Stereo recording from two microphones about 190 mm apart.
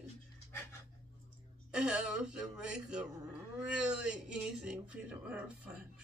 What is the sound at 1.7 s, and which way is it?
Speech, 5° right (ahead or behind).